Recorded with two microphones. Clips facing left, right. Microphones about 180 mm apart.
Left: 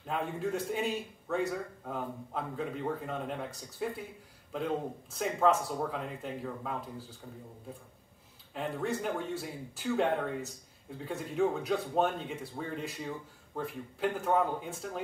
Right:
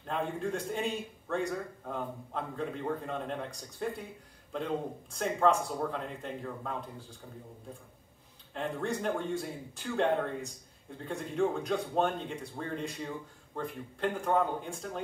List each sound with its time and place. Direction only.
0.0 s a man's voice: 5° left (ahead or behind)
8.5 s a man's voice: 5° left (ahead or behind)